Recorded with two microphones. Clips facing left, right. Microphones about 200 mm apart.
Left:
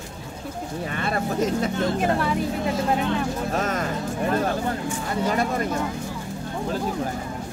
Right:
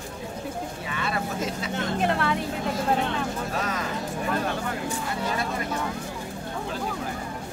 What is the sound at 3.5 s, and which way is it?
Speech, 45° left (ahead or behind).